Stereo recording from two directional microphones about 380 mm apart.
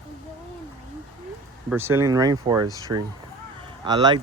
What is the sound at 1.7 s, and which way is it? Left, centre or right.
Speech, centre.